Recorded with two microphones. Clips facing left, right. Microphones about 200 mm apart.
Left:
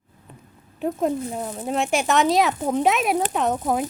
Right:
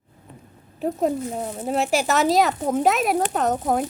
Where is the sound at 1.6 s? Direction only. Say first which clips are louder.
Right 1 dB; centre (ahead or behind).